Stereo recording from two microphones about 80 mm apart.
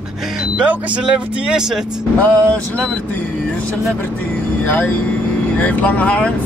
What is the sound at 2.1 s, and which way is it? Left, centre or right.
Speech, centre.